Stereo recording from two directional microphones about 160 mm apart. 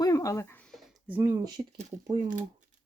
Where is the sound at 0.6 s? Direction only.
Centre (ahead or behind).